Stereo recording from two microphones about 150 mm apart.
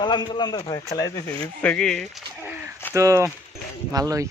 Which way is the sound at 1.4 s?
10° left (ahead or behind).